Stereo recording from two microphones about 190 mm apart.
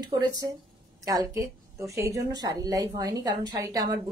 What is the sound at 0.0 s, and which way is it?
A woman's voice, 20° right (ahead or behind).